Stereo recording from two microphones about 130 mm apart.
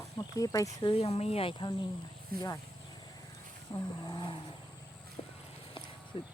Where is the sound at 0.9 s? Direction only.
55° left (ahead or behind).